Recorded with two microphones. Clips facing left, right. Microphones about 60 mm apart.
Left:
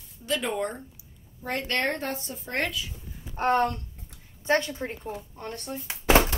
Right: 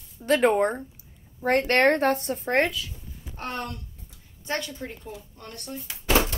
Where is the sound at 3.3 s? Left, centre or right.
Left.